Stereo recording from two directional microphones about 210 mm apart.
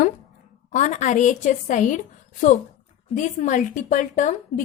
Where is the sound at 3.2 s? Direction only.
35° left (ahead or behind).